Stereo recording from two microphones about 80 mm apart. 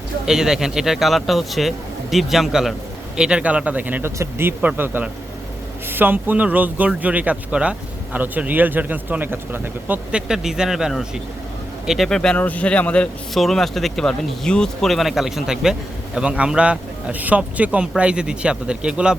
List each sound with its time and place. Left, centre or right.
0.3 s a man's voice: centre; by 10.0 s right
10.1 s speech: centre
12.0 s speech: centre
12.4 s speech: centre
13.3 s speech: centre